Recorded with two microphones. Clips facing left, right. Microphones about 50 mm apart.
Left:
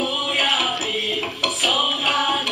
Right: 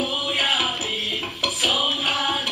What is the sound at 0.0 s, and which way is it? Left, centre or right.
Music, centre.